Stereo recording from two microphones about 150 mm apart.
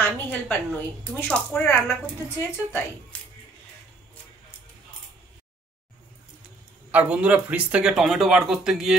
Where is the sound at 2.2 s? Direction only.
15° left (ahead or behind).